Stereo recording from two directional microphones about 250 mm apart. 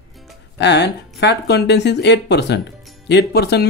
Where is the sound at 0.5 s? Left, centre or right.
Left.